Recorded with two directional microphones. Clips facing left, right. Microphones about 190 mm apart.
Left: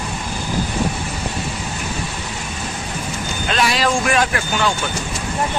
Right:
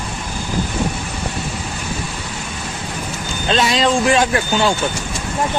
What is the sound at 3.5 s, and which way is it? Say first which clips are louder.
A man's voice: right 3 dB; 25° right (ahead or behind).